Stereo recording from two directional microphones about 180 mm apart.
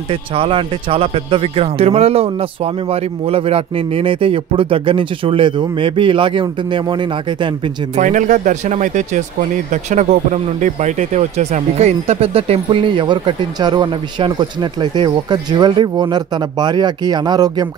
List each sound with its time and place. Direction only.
0.1 s speech: 30° right (ahead or behind)
7.9 s speech: 45° right (ahead or behind); by 17.6 s 25° right (ahead or behind)